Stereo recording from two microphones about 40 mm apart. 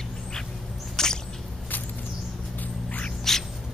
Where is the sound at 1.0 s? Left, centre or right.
Centre.